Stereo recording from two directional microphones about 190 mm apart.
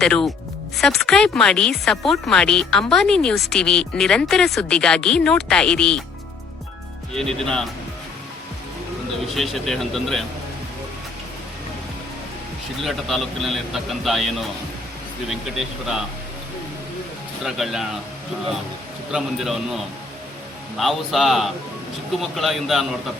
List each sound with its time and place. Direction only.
0.0 s speech: 5° left (ahead or behind)
7.1 s speech: centre (ahead or behind)
9.3 s speech: centre (ahead or behind)
12.8 s speech: centre (ahead or behind)
15.3 s speech: centre (ahead or behind)
17.4 s speech: centre (ahead or behind)
19.1 s speech: centre (ahead or behind)